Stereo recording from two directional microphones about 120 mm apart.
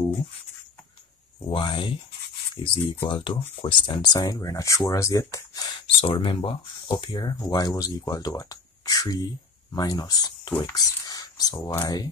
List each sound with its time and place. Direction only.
1.5 s speech: 45° left (ahead or behind)
10.7 s a sound: 30° left (ahead or behind)
11.6 s speech: 30° left (ahead or behind)